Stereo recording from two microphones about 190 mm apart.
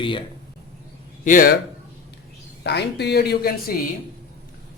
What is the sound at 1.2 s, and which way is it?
Speech, 45° left (ahead or behind).